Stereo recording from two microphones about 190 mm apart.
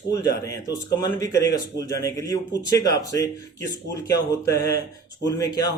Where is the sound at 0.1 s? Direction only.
20° left (ahead or behind).